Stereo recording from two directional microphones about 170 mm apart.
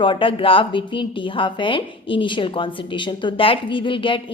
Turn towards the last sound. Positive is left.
turn(degrees=30)  # may be behind; listen again after turning